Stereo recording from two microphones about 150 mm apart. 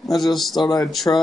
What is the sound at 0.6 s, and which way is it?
Speech, 30° left (ahead or behind).